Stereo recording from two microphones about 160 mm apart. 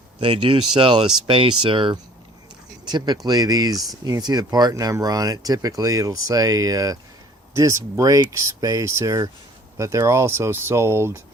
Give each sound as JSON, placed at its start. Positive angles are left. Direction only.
{"t": 0.2, "sound": "speech", "side_deg": -30}